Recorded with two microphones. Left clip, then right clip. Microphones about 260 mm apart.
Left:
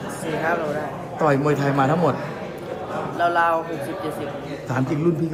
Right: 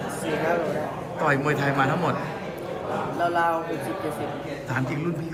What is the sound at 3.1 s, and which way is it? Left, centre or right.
Speech, centre.